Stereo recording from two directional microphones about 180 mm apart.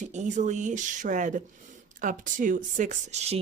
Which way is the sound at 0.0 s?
40° right (ahead or behind).